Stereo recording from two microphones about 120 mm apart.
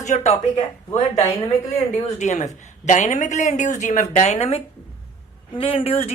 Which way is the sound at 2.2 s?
75° left (ahead or behind).